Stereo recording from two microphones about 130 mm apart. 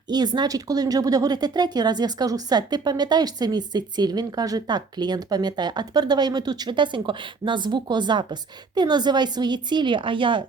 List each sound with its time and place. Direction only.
0.1 s speech: 30° right (ahead or behind)